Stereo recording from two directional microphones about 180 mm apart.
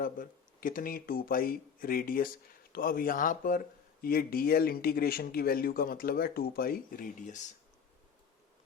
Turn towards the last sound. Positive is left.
turn(degrees=45)  # may be behind; listen again after turning